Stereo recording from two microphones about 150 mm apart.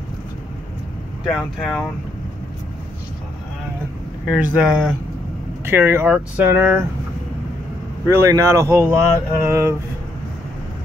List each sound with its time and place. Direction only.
1.2 s speech: 5° left (ahead or behind)
4.6 s speech: 5° right (ahead or behind)
8.1 s speech: 20° right (ahead or behind)